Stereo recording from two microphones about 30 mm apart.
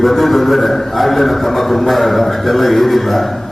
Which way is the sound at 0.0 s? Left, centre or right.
Centre.